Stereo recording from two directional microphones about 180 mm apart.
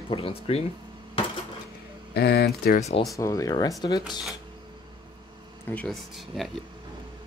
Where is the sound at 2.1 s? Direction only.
65° left (ahead or behind).